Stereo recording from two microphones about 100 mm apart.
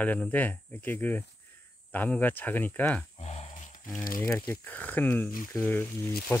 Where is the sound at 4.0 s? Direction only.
30° left (ahead or behind).